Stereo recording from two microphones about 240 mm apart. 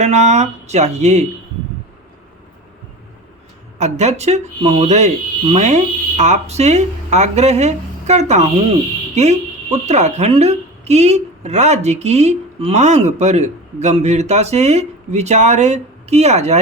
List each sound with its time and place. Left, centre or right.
0.0 s a woman's voice: right
3.8 s a woman's voice: right